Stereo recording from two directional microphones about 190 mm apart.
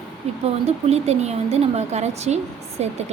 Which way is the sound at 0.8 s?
35° right (ahead or behind).